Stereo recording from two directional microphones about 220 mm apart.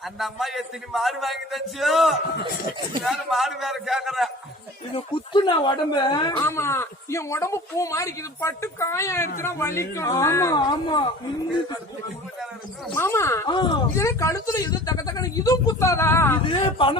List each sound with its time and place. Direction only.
0.2 s a man's voice: centre (ahead or behind)
4.9 s speech: 20° left (ahead or behind)
12.9 s speech: 10° left (ahead or behind)
16.4 s speech: 20° left (ahead or behind)